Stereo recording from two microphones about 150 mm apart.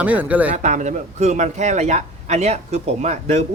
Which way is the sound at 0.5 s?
55° right (ahead or behind).